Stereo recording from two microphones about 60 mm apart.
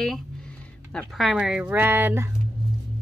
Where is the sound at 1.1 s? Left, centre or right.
Centre.